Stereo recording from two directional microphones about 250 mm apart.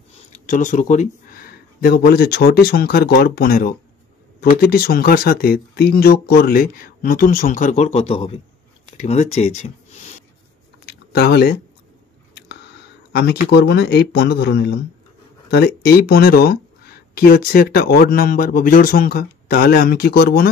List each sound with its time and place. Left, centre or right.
0.3 s speech: left
10.9 s chewing: left
13.1 s speech: left